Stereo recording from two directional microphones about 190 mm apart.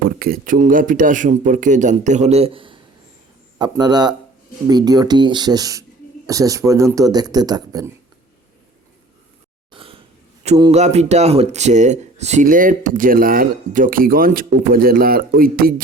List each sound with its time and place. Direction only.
0.2 s a man's voice: 50° right (ahead or behind); by 7.9 s 20° right (ahead or behind)
9.7 s a sound: 30° right (ahead or behind)
10.4 s speech: 35° right (ahead or behind); by 15.7 s 50° right (ahead or behind)